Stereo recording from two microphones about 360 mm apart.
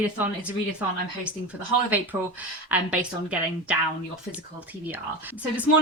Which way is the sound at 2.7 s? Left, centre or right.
Centre.